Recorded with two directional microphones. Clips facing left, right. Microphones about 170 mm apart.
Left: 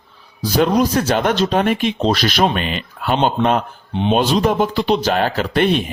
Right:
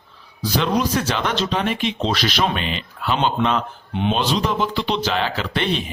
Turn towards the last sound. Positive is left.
turn(degrees=50)  # may be behind; listen again after turning